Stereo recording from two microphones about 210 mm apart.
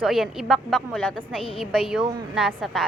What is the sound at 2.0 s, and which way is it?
Speech, 25° right (ahead or behind).